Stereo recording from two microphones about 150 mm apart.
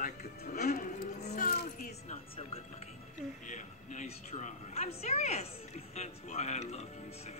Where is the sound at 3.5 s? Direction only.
50° left (ahead or behind).